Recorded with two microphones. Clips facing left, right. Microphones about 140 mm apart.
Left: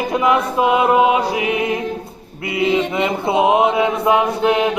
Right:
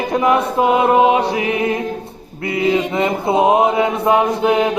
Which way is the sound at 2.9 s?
30° right (ahead or behind).